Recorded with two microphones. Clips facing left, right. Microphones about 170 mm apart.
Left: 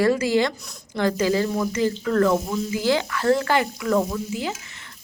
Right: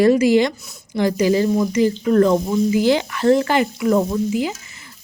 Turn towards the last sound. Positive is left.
turn(degrees=-15)  # may be behind; listen again after turning